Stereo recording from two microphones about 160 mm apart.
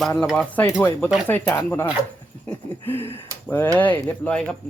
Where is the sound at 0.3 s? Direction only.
5° left (ahead or behind).